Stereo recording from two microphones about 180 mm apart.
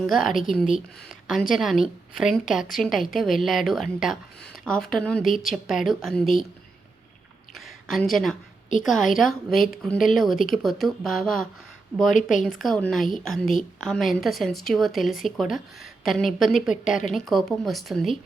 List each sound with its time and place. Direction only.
0.0 s speech: centre (ahead or behind)
7.5 s a woman's voice: centre (ahead or behind)
12.1 s a woman's voice: 45° left (ahead or behind)
12.5 s speech: centre (ahead or behind)